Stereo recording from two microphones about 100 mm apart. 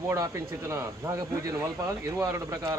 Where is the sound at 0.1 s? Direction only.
30° right (ahead or behind).